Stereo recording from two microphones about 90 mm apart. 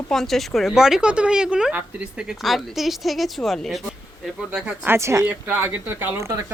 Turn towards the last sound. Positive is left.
turn(degrees=-35)  # may be behind; listen again after turning